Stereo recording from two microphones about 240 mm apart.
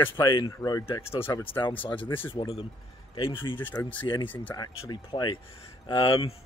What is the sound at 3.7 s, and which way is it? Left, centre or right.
Speech, centre.